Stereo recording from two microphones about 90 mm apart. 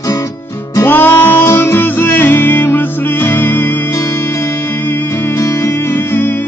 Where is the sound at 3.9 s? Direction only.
35° left (ahead or behind).